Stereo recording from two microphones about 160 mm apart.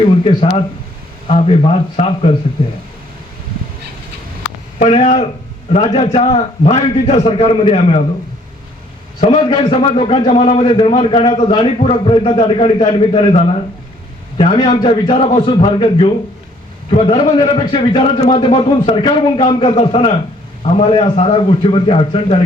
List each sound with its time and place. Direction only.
0.3 s a man's voice: 35° left (ahead or behind)
4.8 s a man's voice: 45° left (ahead or behind)
9.2 s a man's voice: 35° left (ahead or behind)